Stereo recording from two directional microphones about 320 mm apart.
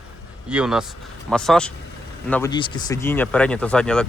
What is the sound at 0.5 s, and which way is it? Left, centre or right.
Speech, centre.